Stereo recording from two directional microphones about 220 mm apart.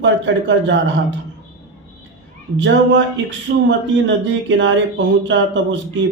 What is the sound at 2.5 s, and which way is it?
Speech, 55° right (ahead or behind).